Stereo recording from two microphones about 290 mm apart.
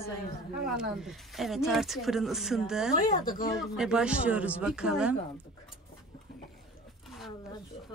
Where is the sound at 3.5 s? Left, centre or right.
Centre.